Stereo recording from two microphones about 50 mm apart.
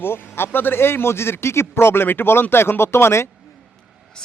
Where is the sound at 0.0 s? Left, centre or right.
Left.